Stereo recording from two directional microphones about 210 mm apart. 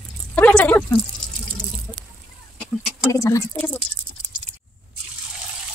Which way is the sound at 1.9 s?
25° left (ahead or behind).